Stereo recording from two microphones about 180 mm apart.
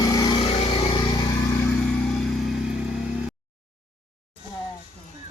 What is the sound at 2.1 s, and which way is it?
Vehicle, centre (ahead or behind).